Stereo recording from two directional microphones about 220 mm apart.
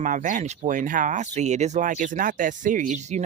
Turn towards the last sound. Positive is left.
turn(degrees=-30)  # may be behind; listen again after turning